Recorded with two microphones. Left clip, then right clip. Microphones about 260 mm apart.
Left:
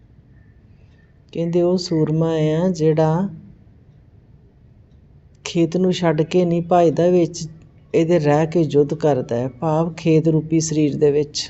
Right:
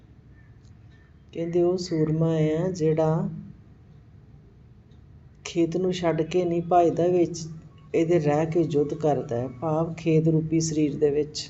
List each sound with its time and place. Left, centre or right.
1.3 s speech: left
5.4 s speech: left